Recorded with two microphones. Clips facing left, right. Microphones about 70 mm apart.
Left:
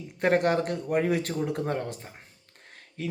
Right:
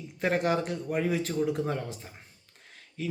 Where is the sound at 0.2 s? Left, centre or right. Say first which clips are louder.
Left 3 dB; left.